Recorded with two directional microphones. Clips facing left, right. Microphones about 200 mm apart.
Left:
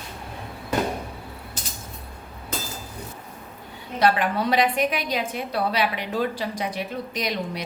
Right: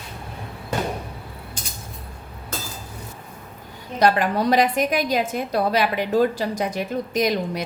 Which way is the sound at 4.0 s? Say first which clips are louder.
Right 3 dB; 40° right (ahead or behind).